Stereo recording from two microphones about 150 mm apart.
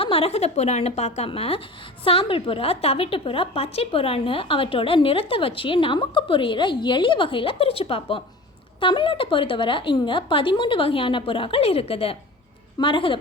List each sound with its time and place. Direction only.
0.0 s a woman's voice: 40° left (ahead or behind)